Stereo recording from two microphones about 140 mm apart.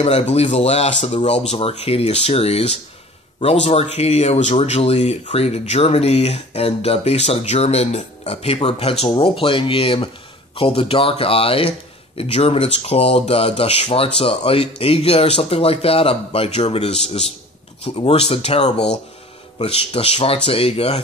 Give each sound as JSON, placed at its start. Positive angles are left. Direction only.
{"t": 0.0, "sound": "speech", "side_deg": 50}